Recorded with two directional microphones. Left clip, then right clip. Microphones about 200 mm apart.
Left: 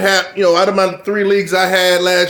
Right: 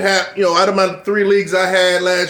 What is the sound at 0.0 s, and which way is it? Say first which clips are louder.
Speech: left 2 dB; 30° left (ahead or behind).